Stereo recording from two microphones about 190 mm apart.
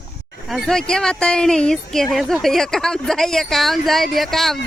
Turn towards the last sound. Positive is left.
turn(degrees=0)  # may be behind; listen again after turning